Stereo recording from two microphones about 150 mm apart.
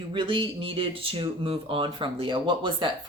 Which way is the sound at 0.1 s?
35° right (ahead or behind).